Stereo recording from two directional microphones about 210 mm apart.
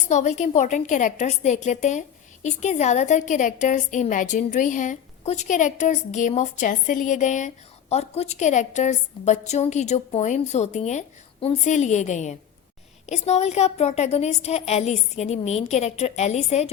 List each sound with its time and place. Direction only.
0.1 s a woman's voice: 35° left (ahead or behind)